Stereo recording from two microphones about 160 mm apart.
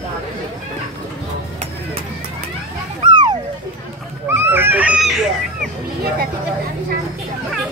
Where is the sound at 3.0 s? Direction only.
30° right (ahead or behind).